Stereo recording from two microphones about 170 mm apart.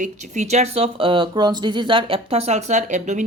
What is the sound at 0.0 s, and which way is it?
Speech, 40° right (ahead or behind).